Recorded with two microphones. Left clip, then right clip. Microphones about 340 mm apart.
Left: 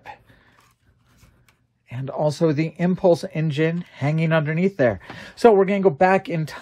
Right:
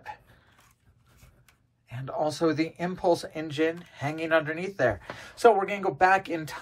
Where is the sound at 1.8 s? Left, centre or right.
Centre.